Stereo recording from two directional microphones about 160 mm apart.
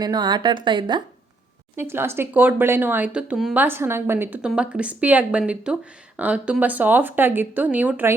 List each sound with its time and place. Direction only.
0.0 s a woman's voice: 25° right (ahead or behind)
1.7 s speech: 15° right (ahead or behind)